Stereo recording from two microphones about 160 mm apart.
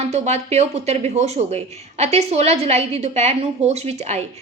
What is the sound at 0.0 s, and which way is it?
A woman's voice, 40° right (ahead or behind).